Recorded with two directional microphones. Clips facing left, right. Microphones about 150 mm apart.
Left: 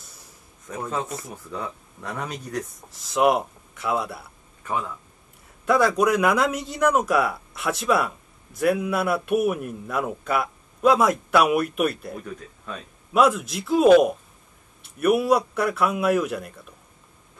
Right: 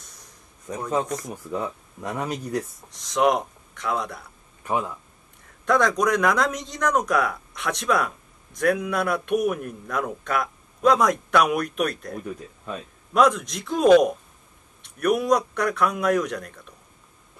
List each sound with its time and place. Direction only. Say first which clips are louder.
0.0 s a sound: even; 5° left (ahead or behind)
1.0 s a man's voice: right 4 dB; 5° left (ahead or behind)
2.0 s a man's voice: right 3 dB; 5° right (ahead or behind)
4.6 s speech: right 2 dB; 15° right (ahead or behind)
5.7 s a man's voice: left 1 dB; 5° left (ahead or behind)
12.3 s speech: right 2 dB; 10° right (ahead or behind)
13.1 s a man's voice: even; 5° left (ahead or behind)